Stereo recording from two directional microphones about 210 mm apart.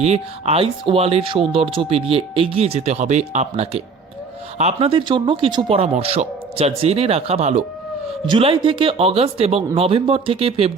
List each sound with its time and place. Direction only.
0.0 s speech: 30° right (ahead or behind)